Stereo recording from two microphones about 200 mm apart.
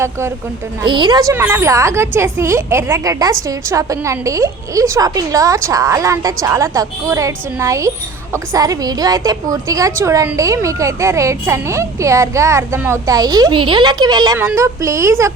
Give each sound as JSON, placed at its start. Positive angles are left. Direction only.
{"t": 0.8, "sound": "a woman's voice", "side_deg": -25}